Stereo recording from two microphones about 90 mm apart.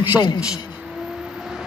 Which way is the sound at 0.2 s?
10° right (ahead or behind).